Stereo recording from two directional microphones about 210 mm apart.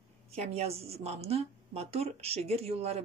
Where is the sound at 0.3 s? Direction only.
30° right (ahead or behind).